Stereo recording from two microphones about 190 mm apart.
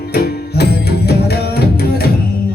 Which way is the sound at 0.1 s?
55° left (ahead or behind).